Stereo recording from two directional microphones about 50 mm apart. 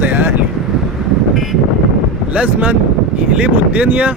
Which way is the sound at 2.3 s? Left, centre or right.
Right.